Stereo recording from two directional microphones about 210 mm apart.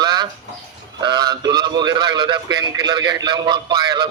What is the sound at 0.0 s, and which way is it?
Chicken, 20° right (ahead or behind).